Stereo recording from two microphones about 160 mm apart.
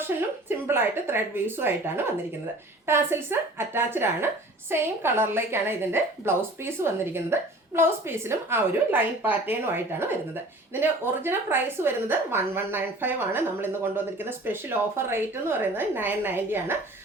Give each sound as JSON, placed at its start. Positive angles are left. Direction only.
{"t": 0.0, "sound": "a woman's voice", "side_deg": -15}